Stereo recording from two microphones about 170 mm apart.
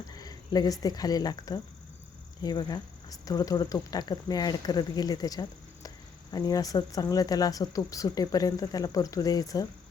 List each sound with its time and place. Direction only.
0.2 s speech: 25° left (ahead or behind)